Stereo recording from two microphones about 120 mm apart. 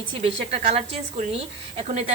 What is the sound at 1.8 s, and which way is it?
Speech, 60° right (ahead or behind).